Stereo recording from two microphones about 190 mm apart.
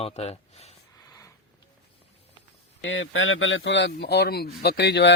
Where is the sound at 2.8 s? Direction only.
75° left (ahead or behind).